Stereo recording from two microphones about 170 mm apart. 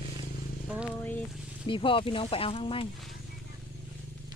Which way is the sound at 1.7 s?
30° left (ahead or behind).